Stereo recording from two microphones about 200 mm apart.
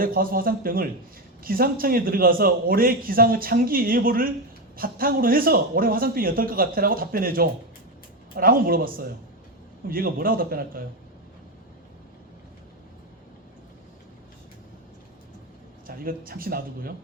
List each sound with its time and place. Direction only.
0.0 s a man's voice: 45° right (ahead or behind)
15.9 s a man's voice: 45° right (ahead or behind)